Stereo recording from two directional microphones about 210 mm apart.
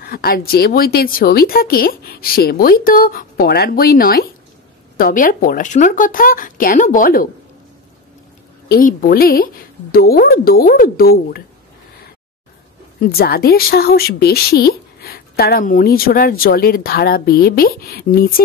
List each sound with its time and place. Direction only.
0.0 s speech: 45° left (ahead or behind)
8.6 s speech: 45° left (ahead or behind)
13.0 s speech: 45° left (ahead or behind)